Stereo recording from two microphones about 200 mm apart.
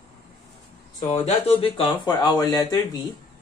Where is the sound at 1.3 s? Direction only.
30° left (ahead or behind).